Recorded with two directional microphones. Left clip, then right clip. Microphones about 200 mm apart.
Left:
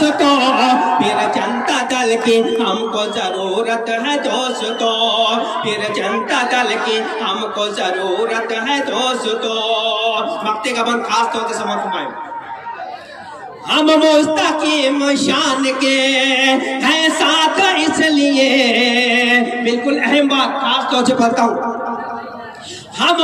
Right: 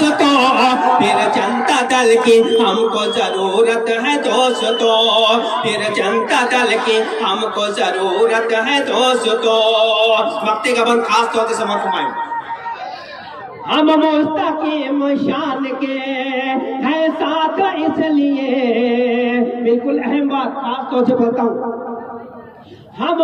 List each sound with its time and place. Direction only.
0.0 s music: 35° left (ahead or behind)
13.7 s a man's voice: 40° left (ahead or behind)
23.0 s a man's voice: 40° left (ahead or behind)